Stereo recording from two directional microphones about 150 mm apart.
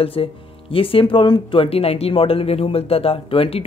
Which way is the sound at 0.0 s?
40° left (ahead or behind).